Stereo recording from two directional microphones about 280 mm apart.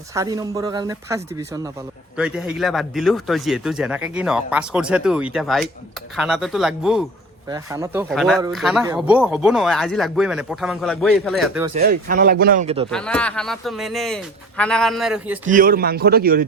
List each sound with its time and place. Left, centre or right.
0.1 s speech: centre
8.1 s speech: centre
11.8 s speech: right
12.9 s speech: centre
15.4 s speech: right